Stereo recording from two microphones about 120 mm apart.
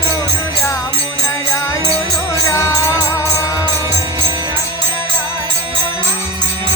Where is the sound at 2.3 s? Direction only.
25° left (ahead or behind).